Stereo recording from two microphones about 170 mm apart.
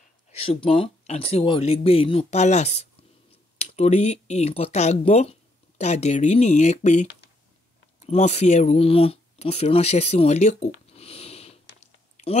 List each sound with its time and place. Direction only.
0.3 s speech: 35° left (ahead or behind)
8.1 s speech: 40° left (ahead or behind)
11.8 s a sound: 40° left (ahead or behind)